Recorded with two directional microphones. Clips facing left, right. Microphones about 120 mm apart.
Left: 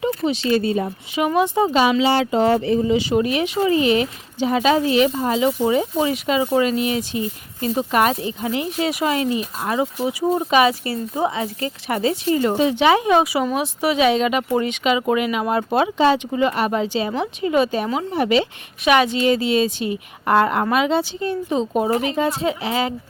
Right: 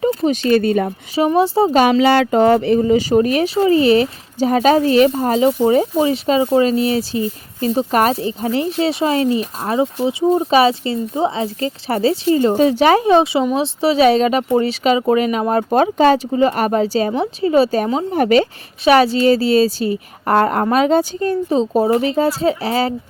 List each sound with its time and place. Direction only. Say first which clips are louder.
0.0 s a sound: right 5 dB; 30° right (ahead or behind)
0.3 s speech: right 4 dB; 60° right (ahead or behind)
1.4 s a woman's voice: right 3 dB; 30° right (ahead or behind)
1.7 s speech: right 5 dB; 50° right (ahead or behind)
2.8 s a woman's voice: right 5 dB; 45° right (ahead or behind)
12.5 s a woman's voice: right 4 dB; 40° right (ahead or behind)
16.3 s a woman's voice: right 4 dB; 30° right (ahead or behind)
16.6 s a woman's voice: right 4 dB; 45° right (ahead or behind)